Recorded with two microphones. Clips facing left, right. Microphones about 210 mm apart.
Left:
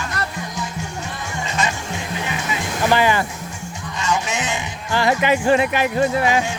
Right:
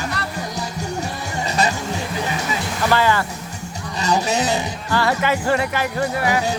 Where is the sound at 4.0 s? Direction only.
35° right (ahead or behind).